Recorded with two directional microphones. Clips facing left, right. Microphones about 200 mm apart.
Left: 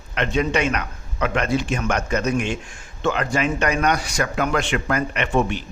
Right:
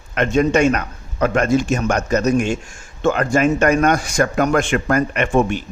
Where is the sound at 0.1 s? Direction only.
45° right (ahead or behind).